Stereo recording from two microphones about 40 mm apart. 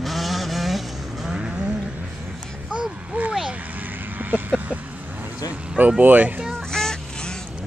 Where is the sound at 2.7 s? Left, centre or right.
Right.